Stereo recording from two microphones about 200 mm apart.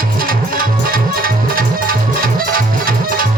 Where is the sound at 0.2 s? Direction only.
45° right (ahead or behind).